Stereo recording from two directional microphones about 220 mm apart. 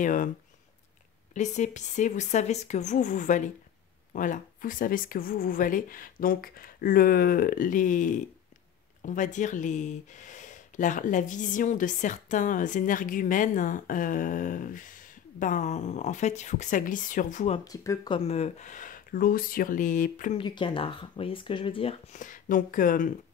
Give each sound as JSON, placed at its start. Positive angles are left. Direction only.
{"t": 0.0, "sound": "speech", "side_deg": 35}
{"t": 1.3, "sound": "speech", "side_deg": 30}
{"t": 17.6, "sound": "speech", "side_deg": 20}
{"t": 20.3, "sound": "speech", "side_deg": 20}